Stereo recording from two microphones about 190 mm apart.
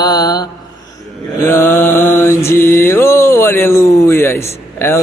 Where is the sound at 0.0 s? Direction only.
20° left (ahead or behind).